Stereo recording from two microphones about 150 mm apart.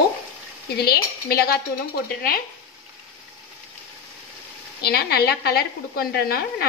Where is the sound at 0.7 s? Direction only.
90° left.